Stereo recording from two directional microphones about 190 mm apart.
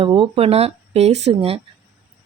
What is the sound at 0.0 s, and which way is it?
Speech, 30° right (ahead or behind).